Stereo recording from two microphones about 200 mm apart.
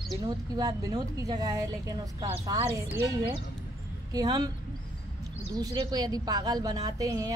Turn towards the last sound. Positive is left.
turn(degrees=-15)  # may be behind; listen again after turning